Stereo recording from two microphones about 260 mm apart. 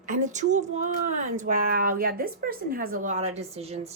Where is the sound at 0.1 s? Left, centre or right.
Right.